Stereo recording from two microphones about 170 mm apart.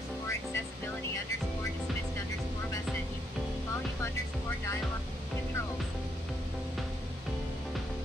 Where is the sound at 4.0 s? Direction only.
15° left (ahead or behind).